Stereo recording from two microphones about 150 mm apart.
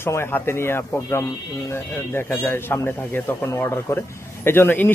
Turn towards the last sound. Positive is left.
turn(degrees=10)  # may be behind; listen again after turning